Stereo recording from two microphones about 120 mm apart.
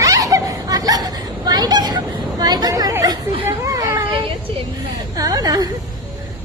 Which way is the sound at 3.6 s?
25° right (ahead or behind).